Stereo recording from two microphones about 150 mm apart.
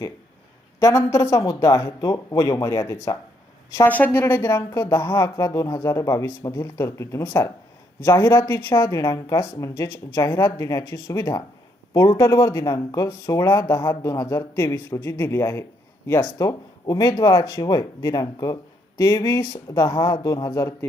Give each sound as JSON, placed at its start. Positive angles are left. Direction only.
{"t": 0.8, "sound": "speech", "side_deg": 20}